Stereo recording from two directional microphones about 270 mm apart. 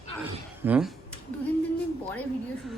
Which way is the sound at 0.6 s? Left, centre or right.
Centre.